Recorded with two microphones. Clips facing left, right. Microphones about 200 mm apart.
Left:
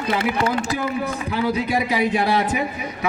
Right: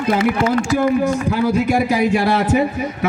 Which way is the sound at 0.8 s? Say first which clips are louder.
Right 8 dB; 45° right (ahead or behind).